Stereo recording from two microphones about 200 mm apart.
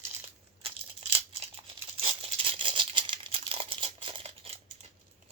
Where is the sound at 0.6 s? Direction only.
30° right (ahead or behind).